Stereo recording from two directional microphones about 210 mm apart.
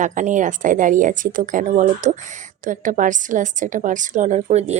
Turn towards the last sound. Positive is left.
turn(degrees=-30)  # may be behind; listen again after turning